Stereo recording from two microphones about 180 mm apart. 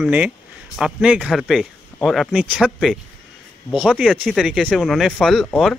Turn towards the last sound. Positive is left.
turn(degrees=0)  # may be behind; listen again after turning